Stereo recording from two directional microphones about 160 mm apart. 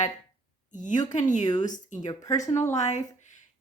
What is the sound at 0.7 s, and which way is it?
Speech, 50° left (ahead or behind).